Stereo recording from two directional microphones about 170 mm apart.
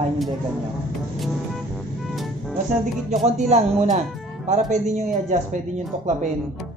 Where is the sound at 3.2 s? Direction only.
40° right (ahead or behind).